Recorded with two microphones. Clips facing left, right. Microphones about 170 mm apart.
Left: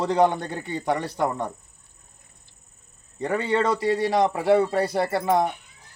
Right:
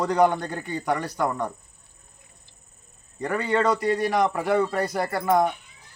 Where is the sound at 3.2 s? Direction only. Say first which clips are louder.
Even; 25° left (ahead or behind).